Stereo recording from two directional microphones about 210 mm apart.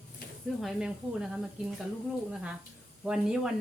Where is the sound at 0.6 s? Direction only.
Centre (ahead or behind).